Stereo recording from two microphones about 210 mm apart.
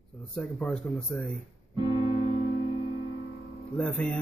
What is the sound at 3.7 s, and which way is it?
Speech, 5° left (ahead or behind).